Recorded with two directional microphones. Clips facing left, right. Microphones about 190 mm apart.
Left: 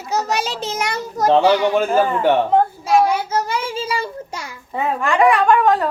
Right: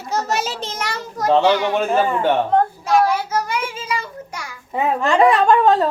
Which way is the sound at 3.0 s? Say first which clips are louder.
Left 1 dB; 25° left (ahead or behind).